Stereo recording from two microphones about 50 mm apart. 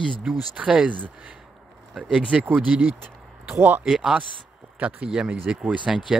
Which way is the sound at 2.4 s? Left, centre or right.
Right.